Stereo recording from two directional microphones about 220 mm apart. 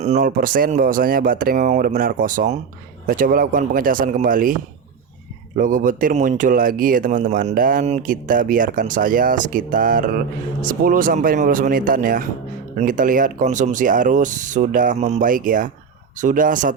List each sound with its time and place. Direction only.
0.0 s speech: 35° right (ahead or behind)